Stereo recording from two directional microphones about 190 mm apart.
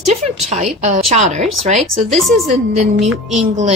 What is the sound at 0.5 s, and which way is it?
A woman's voice, 35° right (ahead or behind).